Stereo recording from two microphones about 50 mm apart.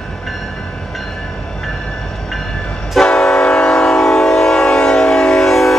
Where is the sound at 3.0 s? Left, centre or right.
Centre.